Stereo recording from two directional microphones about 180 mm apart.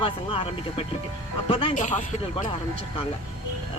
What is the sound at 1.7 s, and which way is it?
Speech, 45° left (ahead or behind).